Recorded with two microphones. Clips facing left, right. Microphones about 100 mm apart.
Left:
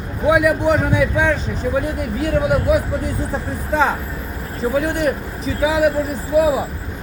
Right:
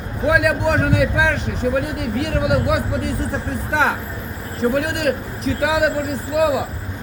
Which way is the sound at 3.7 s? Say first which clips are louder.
Left 2 dB; 85° right.